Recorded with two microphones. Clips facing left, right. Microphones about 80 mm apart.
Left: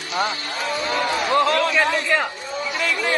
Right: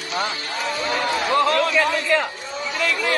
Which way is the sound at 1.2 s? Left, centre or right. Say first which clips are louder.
Even; left.